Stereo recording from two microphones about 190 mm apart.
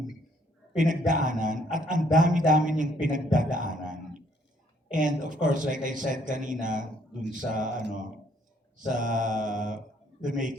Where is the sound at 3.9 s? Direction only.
45° right (ahead or behind).